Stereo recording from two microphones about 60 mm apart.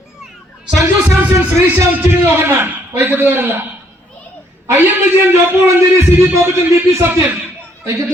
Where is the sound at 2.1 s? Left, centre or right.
Right.